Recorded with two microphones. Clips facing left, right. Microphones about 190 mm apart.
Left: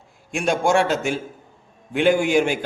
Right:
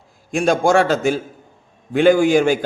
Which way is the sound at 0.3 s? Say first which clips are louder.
Right 4 dB; 35° right (ahead or behind).